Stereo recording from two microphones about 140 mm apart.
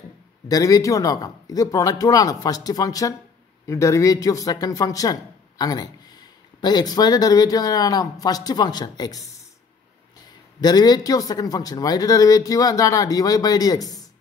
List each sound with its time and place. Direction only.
0.5 s speech: 25° left (ahead or behind)
10.6 s speech: 30° left (ahead or behind)